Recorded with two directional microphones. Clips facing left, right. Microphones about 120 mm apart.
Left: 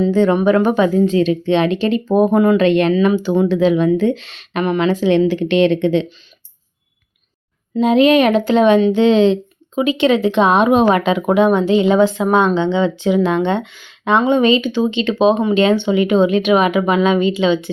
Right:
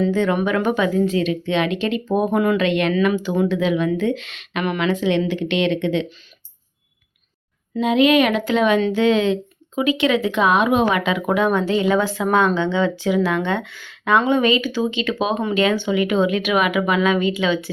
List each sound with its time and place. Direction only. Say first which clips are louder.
0.0 s speech: left 5 dB; 30° left (ahead or behind)
7.8 s speech: left 4 dB; 35° left (ahead or behind)